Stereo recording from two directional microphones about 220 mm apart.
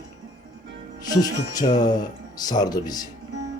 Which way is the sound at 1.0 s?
15° left (ahead or behind).